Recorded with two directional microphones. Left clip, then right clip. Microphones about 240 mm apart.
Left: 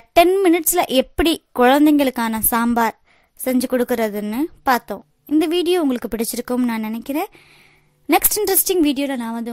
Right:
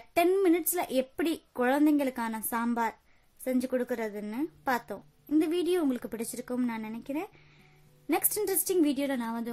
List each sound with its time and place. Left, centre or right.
0.1 s a woman's voice: left